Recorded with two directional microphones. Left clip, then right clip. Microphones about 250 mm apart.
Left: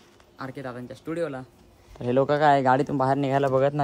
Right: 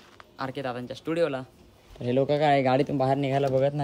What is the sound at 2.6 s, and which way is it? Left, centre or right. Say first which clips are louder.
Speech: left 2 dB; centre.